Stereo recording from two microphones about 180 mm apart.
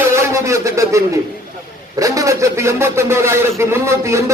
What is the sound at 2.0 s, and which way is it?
Speech, 20° right (ahead or behind).